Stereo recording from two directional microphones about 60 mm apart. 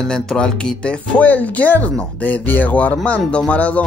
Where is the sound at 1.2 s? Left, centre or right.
Left.